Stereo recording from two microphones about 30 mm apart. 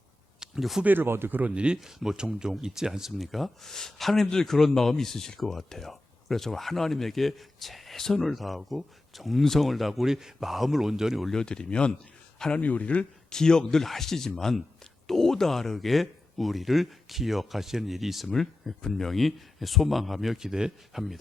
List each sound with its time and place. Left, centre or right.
0.9 s speech: right
1.7 s speech: right
2.1 s speech: right
3.2 s speech: centre
3.6 s speech: centre
10.1 s speech: centre
11.3 s speech: left
12.5 s a man's voice: left
13.3 s speech: left; by 20.3 s centre
20.3 s speech: centre